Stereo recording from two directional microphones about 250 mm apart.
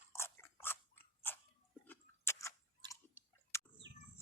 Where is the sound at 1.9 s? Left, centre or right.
Centre.